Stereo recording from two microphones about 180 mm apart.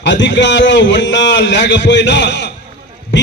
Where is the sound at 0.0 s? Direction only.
80° left.